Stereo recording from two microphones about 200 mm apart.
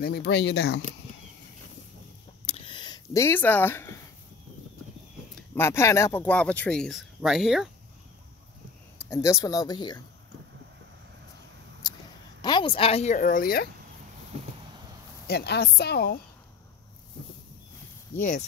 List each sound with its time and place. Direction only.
0.0 s a woman's voice: 55° left (ahead or behind)
2.4 s a sound: 30° left (ahead or behind); by 4.0 s 10° left (ahead or behind)
5.3 s speech: 10° left (ahead or behind)
9.1 s speech: 15° left (ahead or behind)
12.4 s a woman's voice: 20° left (ahead or behind); by 13.7 s 45° left (ahead or behind)
15.2 s a woman's voice: 55° left (ahead or behind)